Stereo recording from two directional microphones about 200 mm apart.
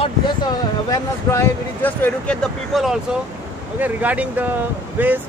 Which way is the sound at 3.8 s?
10° right (ahead or behind).